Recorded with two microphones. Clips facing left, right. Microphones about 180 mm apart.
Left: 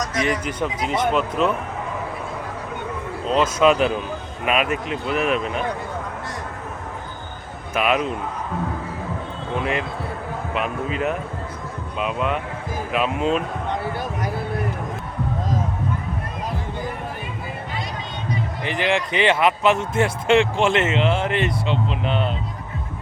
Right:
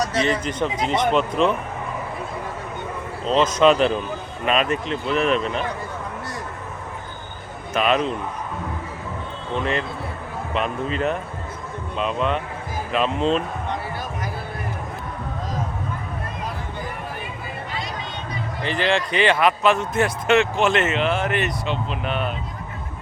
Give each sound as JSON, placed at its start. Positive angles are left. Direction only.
{"t": 0.2, "sound": "speech", "side_deg": 10}
{"t": 3.2, "sound": "speech", "side_deg": 5}
{"t": 7.7, "sound": "speech", "side_deg": 10}
{"t": 9.6, "sound": "speech", "side_deg": 10}
{"t": 18.6, "sound": "a man's voice", "side_deg": 15}